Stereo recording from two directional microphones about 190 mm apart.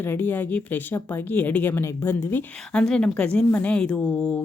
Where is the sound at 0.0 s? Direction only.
10° left (ahead or behind).